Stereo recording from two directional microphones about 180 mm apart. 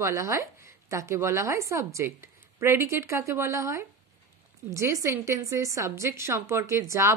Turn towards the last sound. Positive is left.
turn(degrees=-15)  # may be behind; listen again after turning